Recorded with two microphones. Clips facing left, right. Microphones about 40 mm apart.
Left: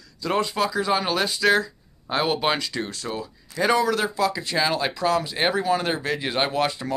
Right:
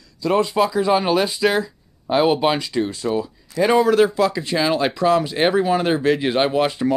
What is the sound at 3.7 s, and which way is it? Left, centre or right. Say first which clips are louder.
Speech: right 8 dB; right.